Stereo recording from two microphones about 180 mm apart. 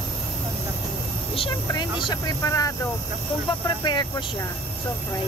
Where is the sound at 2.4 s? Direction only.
20° left (ahead or behind).